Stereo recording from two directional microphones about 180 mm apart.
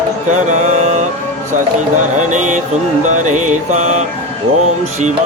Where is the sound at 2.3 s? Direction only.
45° right (ahead or behind).